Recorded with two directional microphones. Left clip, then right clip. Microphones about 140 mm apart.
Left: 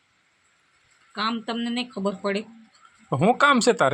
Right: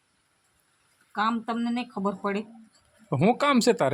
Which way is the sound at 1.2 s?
30° right (ahead or behind).